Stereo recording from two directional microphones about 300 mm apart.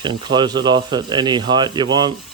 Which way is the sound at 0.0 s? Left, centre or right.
Centre.